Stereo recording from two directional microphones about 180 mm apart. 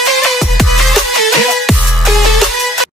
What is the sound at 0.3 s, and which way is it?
Music, centre (ahead or behind).